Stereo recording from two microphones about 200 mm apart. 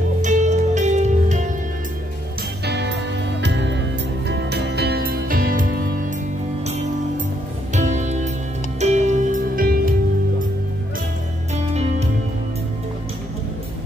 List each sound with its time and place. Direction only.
0.2 s music: 35° right (ahead or behind)
2.6 s music: 60° right (ahead or behind)
7.7 s music: 35° right (ahead or behind)
11.5 s music: 30° right (ahead or behind)